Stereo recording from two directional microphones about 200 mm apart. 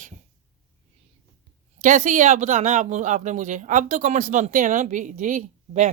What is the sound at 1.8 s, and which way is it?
Speech, 40° right (ahead or behind).